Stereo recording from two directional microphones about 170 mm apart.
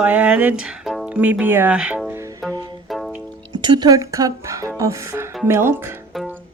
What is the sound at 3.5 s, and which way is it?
Speech, 25° right (ahead or behind).